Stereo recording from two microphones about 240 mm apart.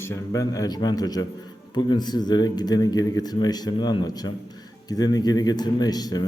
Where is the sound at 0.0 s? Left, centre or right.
Centre.